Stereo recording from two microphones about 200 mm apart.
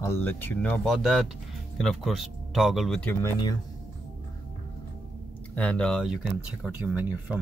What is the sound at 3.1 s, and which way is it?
Speech, 15° left (ahead or behind).